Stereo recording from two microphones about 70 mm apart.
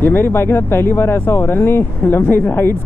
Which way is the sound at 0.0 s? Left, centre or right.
Left.